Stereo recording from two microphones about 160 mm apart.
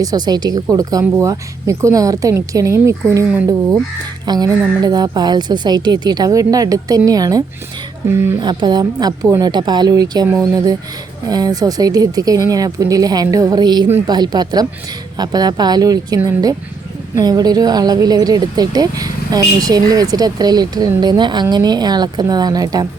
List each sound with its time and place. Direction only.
0.0 s a woman's voice: 25° right (ahead or behind)
8.4 s a woman's voice: 25° right (ahead or behind)
11.3 s a woman's voice: 25° right (ahead or behind)